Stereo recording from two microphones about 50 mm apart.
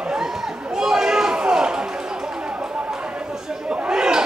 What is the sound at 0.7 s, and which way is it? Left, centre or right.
Chatter, centre.